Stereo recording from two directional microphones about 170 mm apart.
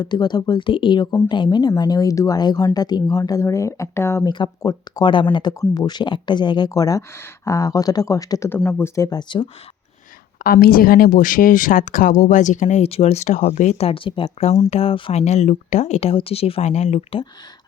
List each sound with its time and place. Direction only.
0.0 s speech: 25° left (ahead or behind)
10.4 s speech: 60° left (ahead or behind); by 17.2 s 35° left (ahead or behind)